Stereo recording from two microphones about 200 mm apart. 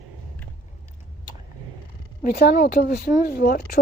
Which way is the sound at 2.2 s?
50° left (ahead or behind).